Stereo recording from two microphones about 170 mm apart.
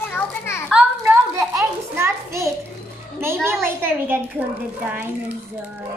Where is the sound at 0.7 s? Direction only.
10° right (ahead or behind).